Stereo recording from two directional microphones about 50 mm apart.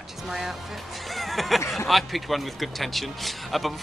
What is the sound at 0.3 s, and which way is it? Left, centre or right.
Speech, centre.